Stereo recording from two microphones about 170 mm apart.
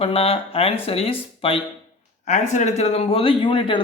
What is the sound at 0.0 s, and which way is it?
Speech, 35° left (ahead or behind).